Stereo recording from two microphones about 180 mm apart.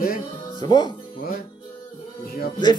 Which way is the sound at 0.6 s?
25° left (ahead or behind).